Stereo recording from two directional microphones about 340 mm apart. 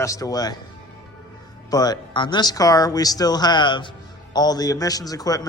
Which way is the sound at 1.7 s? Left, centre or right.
Centre.